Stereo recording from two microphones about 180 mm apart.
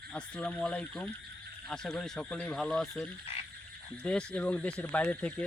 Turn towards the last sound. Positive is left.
turn(degrees=5)  # may be behind; listen again after turning